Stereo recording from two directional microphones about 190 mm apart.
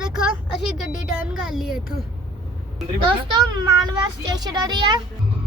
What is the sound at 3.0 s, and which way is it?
A child's voice, 20° right (ahead or behind).